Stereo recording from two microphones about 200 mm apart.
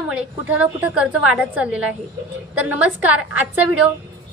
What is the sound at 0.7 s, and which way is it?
A woman's voice, 10° right (ahead or behind).